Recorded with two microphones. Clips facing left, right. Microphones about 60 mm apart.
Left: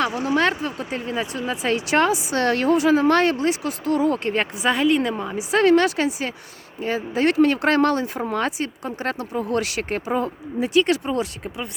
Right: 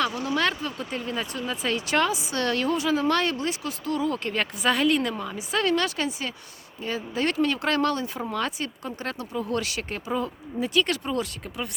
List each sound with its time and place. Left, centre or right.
0.0 s a woman's voice: left
1.5 s a woman's voice: left
4.6 s a woman's voice: centre
5.0 s a woman's voice: left
8.4 s speech: left
9.0 s a woman's voice: left
10.6 s speech: left